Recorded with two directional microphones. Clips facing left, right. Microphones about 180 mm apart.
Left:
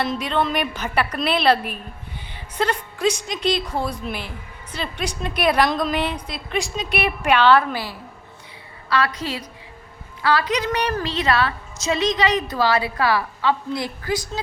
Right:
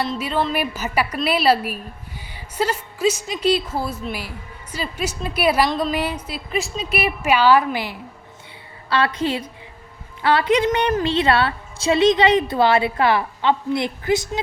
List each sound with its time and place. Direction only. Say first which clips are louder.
0.2 s a woman's voice: even; 5° right (ahead or behind)
8.9 s a woman's voice: right 3 dB; 30° right (ahead or behind)